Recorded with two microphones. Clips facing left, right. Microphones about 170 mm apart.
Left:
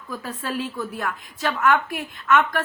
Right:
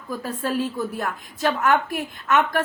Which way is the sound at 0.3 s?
45° right (ahead or behind).